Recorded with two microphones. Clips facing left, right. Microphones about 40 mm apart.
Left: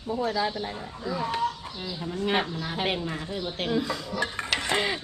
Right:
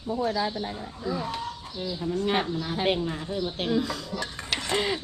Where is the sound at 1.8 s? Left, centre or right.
Left.